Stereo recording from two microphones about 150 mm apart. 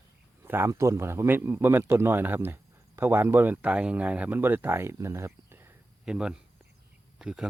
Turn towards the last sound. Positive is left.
turn(degrees=-5)  # may be behind; listen again after turning